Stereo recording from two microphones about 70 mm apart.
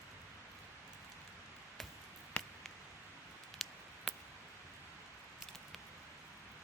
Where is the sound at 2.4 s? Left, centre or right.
Centre.